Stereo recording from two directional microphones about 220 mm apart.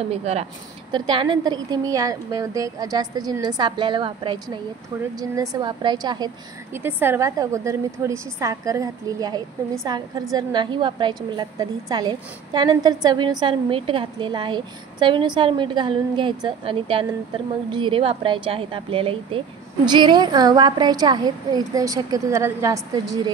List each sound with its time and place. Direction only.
0.1 s a woman's voice: 30° right (ahead or behind)